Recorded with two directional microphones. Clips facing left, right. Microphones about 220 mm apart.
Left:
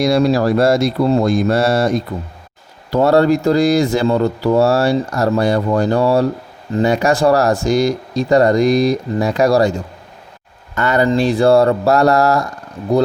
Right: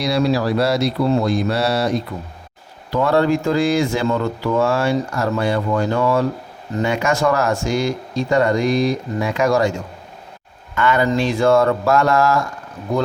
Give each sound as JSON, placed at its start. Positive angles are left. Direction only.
{"t": 0.0, "sound": "speech", "side_deg": 45}